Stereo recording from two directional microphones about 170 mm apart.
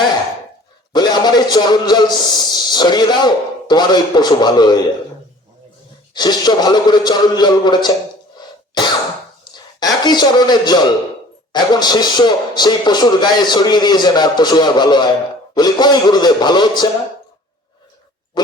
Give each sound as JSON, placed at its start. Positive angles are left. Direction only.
{"t": 0.9, "sound": "a man's voice", "side_deg": 25}
{"t": 6.1, "sound": "a man's voice", "side_deg": 25}
{"t": 8.4, "sound": "cough", "side_deg": 25}
{"t": 9.4, "sound": "a sound", "side_deg": 25}
{"t": 11.5, "sound": "a man's voice", "side_deg": 25}
{"t": 18.4, "sound": "a sound", "side_deg": 25}